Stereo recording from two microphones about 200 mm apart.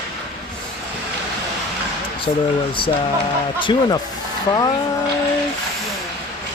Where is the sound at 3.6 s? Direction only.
20° left (ahead or behind).